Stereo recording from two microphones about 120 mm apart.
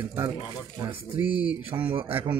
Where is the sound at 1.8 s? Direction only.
50° right (ahead or behind).